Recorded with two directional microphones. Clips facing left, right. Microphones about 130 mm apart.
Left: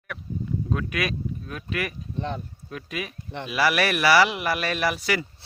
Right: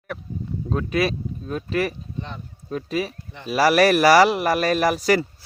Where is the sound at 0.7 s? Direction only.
30° right (ahead or behind).